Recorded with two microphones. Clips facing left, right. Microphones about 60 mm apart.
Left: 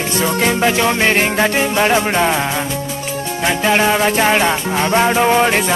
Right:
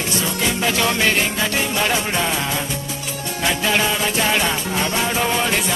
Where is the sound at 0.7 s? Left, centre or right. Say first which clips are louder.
Left 4 dB; left.